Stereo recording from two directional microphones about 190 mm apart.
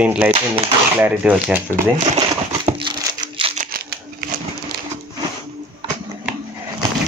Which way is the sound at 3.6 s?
50° right (ahead or behind).